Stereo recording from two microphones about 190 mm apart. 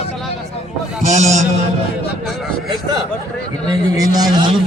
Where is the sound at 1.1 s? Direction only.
40° right (ahead or behind).